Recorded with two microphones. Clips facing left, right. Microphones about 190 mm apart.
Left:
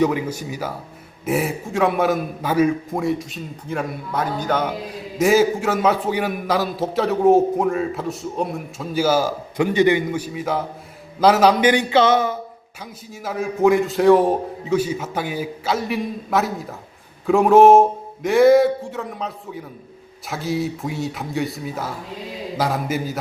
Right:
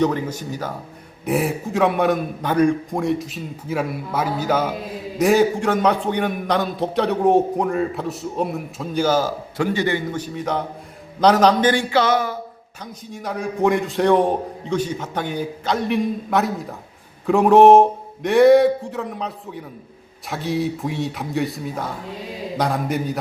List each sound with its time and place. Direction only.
0.0 s a man's voice: 10° left (ahead or behind)
12.8 s a man's voice: 5° left (ahead or behind)